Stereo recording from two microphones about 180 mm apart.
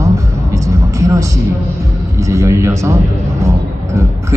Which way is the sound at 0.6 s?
20° right (ahead or behind).